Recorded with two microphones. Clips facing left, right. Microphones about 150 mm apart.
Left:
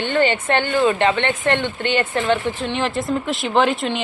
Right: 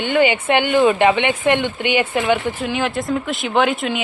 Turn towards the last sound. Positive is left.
turn(degrees=0)  # may be behind; listen again after turning